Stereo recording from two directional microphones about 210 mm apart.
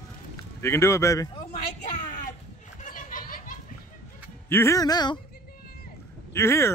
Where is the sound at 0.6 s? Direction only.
15° left (ahead or behind).